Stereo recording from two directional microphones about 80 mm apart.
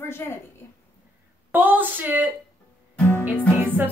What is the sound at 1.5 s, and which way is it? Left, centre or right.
Music, right.